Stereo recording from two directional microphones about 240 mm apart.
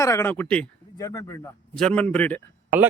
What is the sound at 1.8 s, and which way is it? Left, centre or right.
Speech, centre.